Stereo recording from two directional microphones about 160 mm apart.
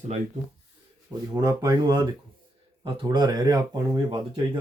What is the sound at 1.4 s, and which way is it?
Speech, 25° right (ahead or behind).